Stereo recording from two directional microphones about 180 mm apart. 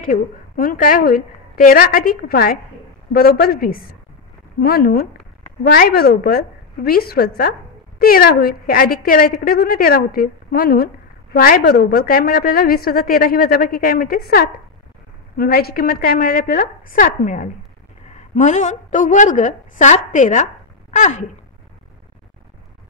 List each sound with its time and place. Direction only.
0.0 s a woman's voice: 50° left (ahead or behind)